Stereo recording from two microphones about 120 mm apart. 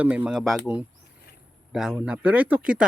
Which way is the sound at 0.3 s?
Centre (ahead or behind).